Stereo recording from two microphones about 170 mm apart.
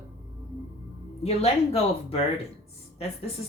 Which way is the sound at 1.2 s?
35° left (ahead or behind).